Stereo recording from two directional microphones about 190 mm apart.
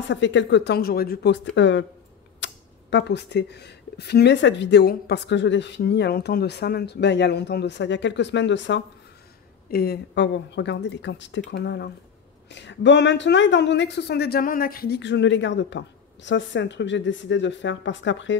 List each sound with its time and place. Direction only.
0.1 s speech: 70° left (ahead or behind)
9.7 s speech: 55° left (ahead or behind); by 18.4 s 75° left (ahead or behind)